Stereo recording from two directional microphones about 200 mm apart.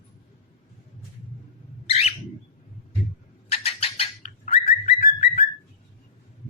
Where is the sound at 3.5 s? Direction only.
30° left (ahead or behind).